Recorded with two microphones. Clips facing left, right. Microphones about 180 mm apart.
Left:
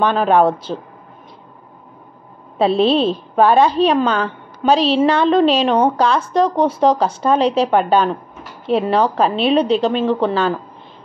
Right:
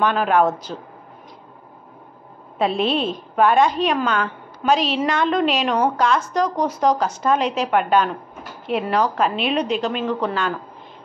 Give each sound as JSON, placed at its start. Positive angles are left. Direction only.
{"t": 0.0, "sound": "speech", "side_deg": 30}
{"t": 2.6, "sound": "a woman's voice", "side_deg": 30}